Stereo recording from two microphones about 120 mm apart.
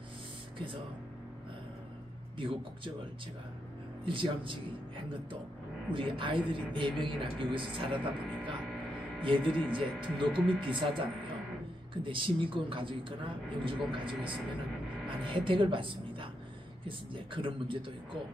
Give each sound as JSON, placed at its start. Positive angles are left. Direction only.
{"t": 2.3, "sound": "speech", "side_deg": -45}
{"t": 4.0, "sound": "speech", "side_deg": -45}